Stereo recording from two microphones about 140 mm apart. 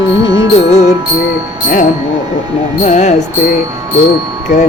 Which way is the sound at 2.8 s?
55° left (ahead or behind).